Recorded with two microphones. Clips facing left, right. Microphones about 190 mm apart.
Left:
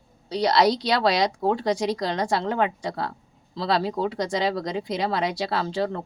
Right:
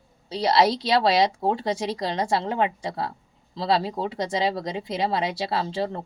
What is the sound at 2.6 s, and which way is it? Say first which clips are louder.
Speech: even; 5° right (ahead or behind).